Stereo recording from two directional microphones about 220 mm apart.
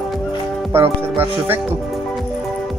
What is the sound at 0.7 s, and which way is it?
Speech, 10° right (ahead or behind).